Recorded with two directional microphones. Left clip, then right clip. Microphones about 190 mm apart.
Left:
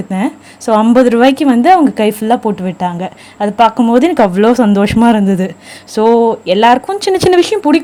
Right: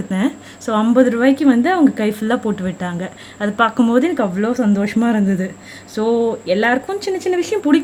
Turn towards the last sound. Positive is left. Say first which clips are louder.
# left 7 dB
turn(degrees=30)  # may be behind; listen again after turning